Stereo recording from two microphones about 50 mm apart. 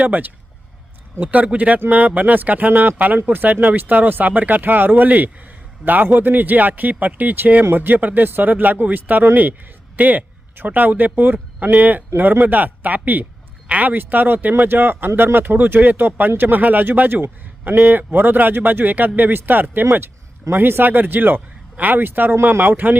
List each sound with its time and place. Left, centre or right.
0.0 s speech: right
12.1 s speech: right
13.9 s speech: right